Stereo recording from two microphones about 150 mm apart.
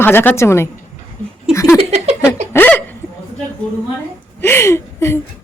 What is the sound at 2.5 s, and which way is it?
Hiccup, 15° left (ahead or behind).